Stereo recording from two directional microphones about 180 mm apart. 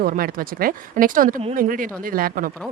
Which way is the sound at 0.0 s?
55° right (ahead or behind).